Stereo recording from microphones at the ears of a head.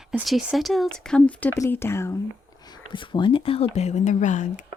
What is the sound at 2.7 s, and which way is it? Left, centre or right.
Speech, left.